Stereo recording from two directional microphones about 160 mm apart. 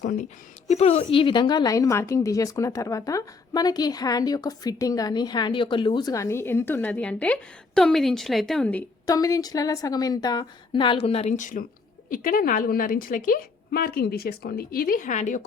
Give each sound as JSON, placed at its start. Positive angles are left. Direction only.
{"t": 0.0, "sound": "a woman's voice", "side_deg": 55}
{"t": 0.7, "sound": "a woman's voice", "side_deg": 45}
{"t": 9.0, "sound": "a woman's voice", "side_deg": 20}